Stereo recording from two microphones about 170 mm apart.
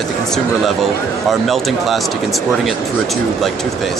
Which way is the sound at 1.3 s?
Centre (ahead or behind).